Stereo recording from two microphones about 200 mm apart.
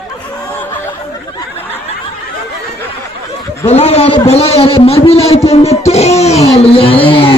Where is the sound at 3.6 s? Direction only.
30° left (ahead or behind).